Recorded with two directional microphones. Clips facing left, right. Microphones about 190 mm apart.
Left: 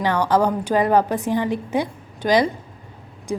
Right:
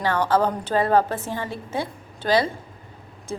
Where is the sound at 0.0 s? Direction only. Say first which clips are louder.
Left 2 dB; 15° left (ahead or behind).